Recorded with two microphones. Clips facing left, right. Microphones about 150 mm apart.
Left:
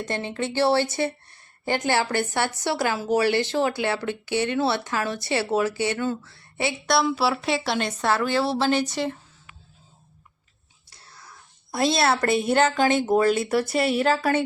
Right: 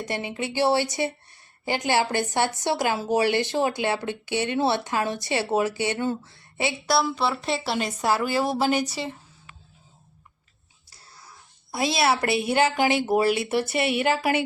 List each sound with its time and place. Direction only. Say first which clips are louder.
0.0 s a woman's voice: left 2 dB; 10° right (ahead or behind)
6.8 s a woman's voice: left 2 dB; centre (ahead or behind)
11.7 s a woman's voice: left 1 dB; centre (ahead or behind)